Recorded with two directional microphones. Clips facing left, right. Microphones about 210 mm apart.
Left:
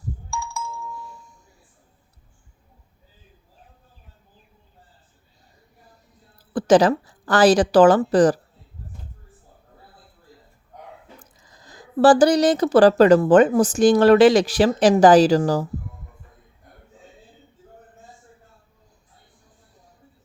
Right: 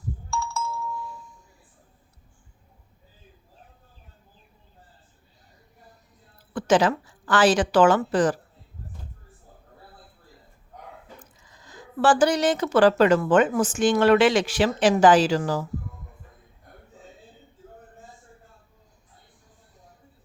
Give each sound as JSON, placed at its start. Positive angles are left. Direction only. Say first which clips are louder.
{"t": 0.3, "sound": "doorbell", "louder": "right 2 dB", "side_deg": 15}
{"t": 6.5, "sound": "a woman's voice", "louder": "left 5 dB", "side_deg": 35}
{"t": 11.2, "sound": "speech", "louder": "even", "side_deg": 35}